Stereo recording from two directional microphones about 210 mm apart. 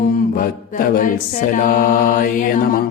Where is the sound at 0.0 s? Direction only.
40° left (ahead or behind).